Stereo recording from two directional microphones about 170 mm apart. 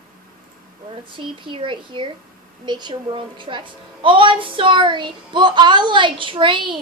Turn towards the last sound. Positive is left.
turn(degrees=-30)  # may be behind; listen again after turning